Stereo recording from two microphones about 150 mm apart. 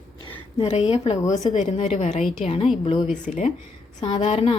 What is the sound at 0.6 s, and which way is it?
Speech, 40° left (ahead or behind).